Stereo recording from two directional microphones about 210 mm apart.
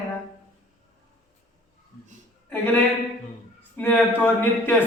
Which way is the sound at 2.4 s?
10° left (ahead or behind).